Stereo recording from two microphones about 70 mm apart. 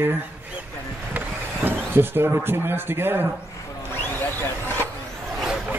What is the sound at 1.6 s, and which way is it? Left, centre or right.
Speech, right.